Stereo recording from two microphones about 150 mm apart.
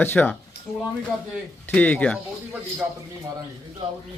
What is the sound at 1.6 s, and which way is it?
Speech, 10° left (ahead or behind).